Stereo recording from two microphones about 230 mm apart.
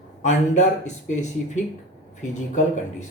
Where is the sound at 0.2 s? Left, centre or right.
Left.